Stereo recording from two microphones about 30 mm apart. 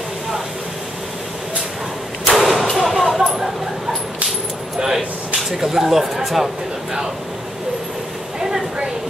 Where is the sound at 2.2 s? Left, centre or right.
Centre.